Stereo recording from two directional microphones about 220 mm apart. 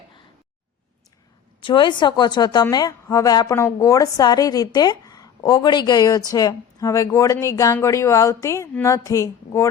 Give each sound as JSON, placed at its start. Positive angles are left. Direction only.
{"t": 1.6, "sound": "a woman's voice", "side_deg": 20}